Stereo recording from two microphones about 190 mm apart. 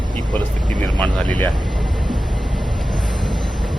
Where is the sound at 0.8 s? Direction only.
25° right (ahead or behind).